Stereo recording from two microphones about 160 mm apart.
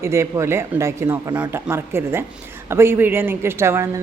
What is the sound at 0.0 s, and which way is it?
A woman's voice, 20° right (ahead or behind).